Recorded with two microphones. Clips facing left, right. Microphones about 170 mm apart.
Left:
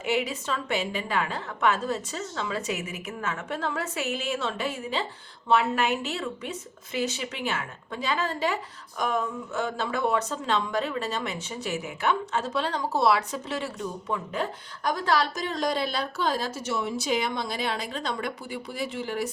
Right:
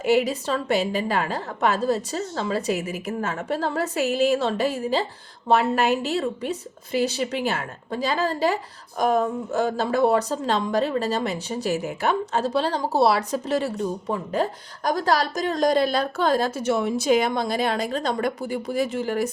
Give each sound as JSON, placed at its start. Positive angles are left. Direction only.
{"t": 0.0, "sound": "speech", "side_deg": -40}